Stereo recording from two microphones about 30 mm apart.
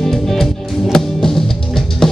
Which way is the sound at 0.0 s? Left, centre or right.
Centre.